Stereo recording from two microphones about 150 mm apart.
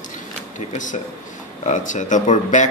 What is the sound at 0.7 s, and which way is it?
Speech, 60° left (ahead or behind).